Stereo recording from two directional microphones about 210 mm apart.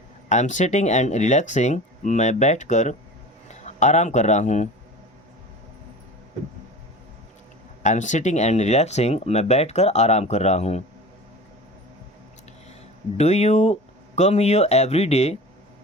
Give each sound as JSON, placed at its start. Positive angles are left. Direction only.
{"t": 0.3, "sound": "a man's voice", "side_deg": 35}
{"t": 7.8, "sound": "speech", "side_deg": 35}
{"t": 13.1, "sound": "speech", "side_deg": 30}